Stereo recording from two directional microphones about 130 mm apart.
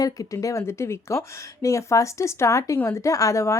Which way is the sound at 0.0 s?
25° left (ahead or behind).